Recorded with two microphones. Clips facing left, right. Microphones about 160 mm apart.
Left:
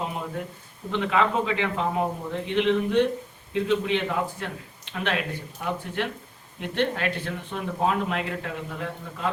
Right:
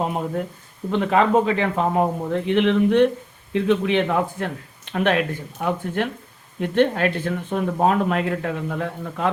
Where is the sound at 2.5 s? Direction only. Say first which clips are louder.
Right 4 dB; 60° right (ahead or behind).